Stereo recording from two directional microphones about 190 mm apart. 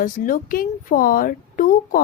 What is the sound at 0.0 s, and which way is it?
Speech, 45° left (ahead or behind).